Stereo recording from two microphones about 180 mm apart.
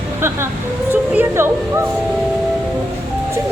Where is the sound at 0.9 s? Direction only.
10° right (ahead or behind).